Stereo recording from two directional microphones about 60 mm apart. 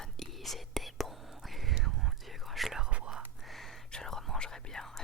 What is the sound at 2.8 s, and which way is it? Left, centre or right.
Whispering, centre.